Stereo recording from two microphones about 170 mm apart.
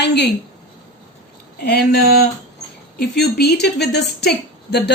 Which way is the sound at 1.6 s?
70° left (ahead or behind).